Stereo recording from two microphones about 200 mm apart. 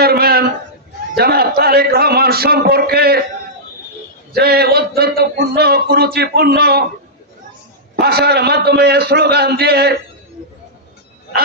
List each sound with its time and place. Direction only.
0.0 s a sound: 50° right (ahead or behind)
1.1 s speech: 50° right (ahead or behind)
4.3 s speech: 50° right (ahead or behind)
7.9 s speech: 50° right (ahead or behind)